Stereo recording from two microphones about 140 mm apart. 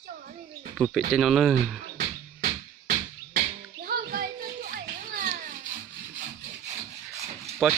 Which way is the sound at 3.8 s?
90° right.